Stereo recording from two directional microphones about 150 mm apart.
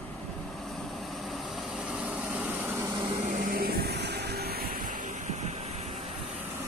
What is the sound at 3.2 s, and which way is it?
Vehicle, 65° right (ahead or behind).